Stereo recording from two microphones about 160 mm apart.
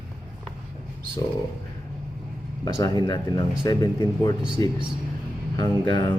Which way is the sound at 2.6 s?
25° left (ahead or behind).